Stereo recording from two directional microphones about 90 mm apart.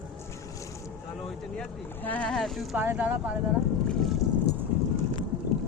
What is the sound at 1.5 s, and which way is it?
Speech, 15° left (ahead or behind).